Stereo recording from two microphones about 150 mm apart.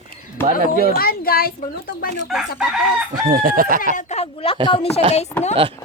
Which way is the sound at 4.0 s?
50° left (ahead or behind).